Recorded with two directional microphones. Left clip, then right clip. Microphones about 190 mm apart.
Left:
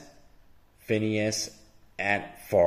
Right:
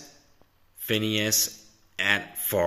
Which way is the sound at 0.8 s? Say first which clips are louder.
Right 1 dB; 5° left (ahead or behind).